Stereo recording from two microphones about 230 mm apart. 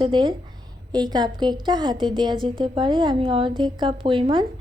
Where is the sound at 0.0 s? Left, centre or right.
Right.